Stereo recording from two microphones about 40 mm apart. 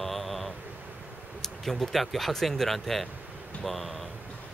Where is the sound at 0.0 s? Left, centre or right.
Centre.